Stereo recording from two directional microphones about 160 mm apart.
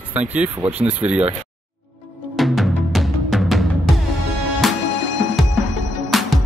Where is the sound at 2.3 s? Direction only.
Centre (ahead or behind).